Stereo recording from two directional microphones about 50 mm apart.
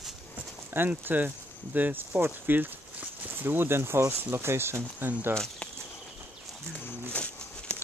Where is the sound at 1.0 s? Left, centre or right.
Right.